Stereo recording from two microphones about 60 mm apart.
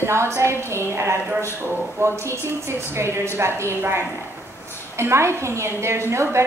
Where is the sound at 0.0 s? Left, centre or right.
Right.